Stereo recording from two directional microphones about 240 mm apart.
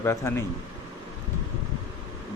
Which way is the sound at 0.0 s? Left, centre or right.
Centre.